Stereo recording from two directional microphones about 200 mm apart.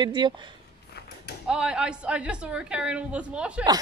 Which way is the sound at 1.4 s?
5° right (ahead or behind).